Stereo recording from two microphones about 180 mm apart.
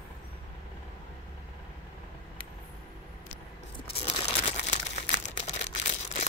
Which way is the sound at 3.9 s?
30° left (ahead or behind).